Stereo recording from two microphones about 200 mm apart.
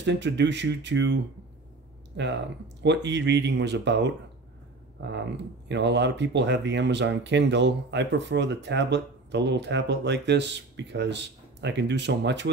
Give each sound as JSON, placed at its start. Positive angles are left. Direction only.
{"t": 0.0, "sound": "speech", "side_deg": -60}